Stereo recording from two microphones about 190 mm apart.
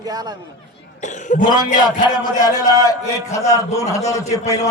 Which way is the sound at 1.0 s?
40° left (ahead or behind).